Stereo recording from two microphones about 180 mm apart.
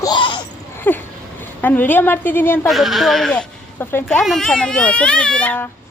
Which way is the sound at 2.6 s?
Centre (ahead or behind).